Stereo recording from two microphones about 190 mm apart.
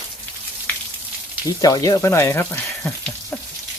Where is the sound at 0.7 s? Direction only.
10° left (ahead or behind).